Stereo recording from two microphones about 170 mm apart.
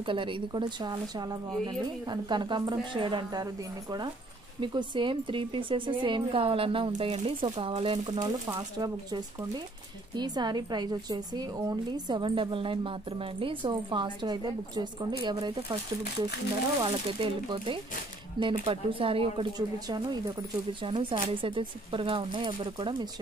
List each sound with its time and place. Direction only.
0.0 s a woman's voice: 30° right (ahead or behind)
4.6 s a woman's voice: 30° right (ahead or behind)
16.8 s a woman's voice: 30° right (ahead or behind)